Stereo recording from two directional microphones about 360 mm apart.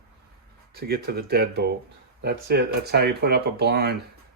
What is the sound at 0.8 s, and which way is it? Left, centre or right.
Speech, right.